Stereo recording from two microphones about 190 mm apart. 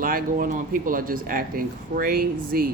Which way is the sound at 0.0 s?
45° right (ahead or behind).